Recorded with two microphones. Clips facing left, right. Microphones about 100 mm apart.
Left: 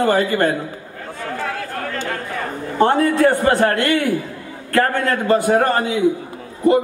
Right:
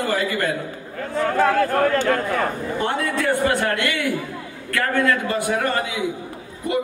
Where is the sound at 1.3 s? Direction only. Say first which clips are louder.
Right 9 dB; 55° right (ahead or behind).